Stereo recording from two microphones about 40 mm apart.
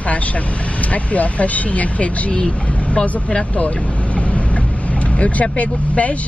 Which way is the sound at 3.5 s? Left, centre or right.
Left.